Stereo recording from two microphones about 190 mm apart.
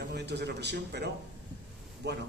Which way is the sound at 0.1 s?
60° right (ahead or behind).